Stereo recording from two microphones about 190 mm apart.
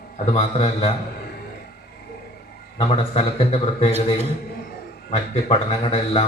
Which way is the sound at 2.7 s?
30° left (ahead or behind).